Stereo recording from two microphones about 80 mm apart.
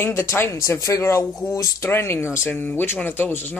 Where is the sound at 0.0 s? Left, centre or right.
Left.